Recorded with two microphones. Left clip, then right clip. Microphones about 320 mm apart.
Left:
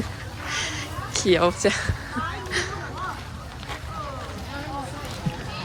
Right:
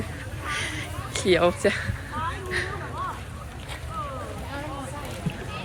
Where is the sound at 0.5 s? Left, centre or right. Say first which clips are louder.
Left 2 dB; centre.